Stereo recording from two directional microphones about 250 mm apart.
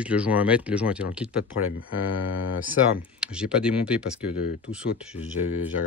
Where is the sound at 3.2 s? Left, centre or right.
Centre.